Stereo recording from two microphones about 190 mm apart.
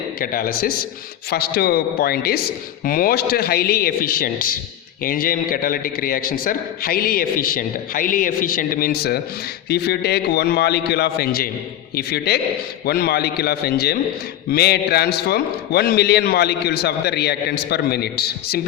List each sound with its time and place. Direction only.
0.2 s a man's voice: 50° left (ahead or behind)